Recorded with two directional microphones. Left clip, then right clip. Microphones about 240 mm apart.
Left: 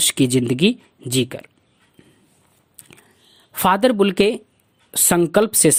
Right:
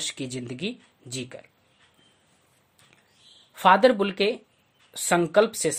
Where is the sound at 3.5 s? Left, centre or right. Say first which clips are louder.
Left 1 dB; left.